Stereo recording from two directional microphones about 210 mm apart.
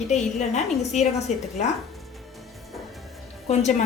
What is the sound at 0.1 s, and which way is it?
A woman's voice, 35° left (ahead or behind).